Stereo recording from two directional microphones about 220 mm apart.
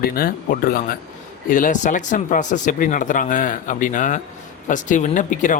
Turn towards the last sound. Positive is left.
turn(degrees=35)  # may be behind; listen again after turning